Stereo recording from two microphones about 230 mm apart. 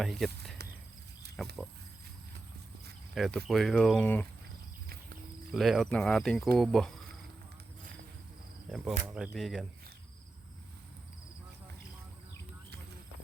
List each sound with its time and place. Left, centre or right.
0.0 s speech: centre
0.6 s a sound: right
1.4 s speech: centre
3.2 s speech: centre
5.5 s speech: centre
8.7 s speech: centre